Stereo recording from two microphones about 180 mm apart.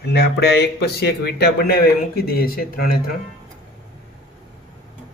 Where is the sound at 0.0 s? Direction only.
65° left (ahead or behind).